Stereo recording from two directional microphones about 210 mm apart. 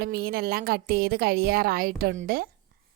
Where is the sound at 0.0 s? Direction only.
45° right (ahead or behind).